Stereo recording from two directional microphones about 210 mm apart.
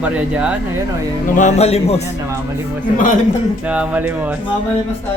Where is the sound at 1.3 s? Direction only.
35° left (ahead or behind).